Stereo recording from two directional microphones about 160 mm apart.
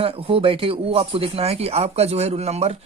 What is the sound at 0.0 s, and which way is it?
Speech, 35° right (ahead or behind).